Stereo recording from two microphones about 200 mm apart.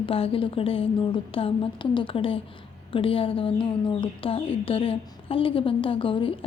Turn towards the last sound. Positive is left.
turn(degrees=25)  # may be behind; listen again after turning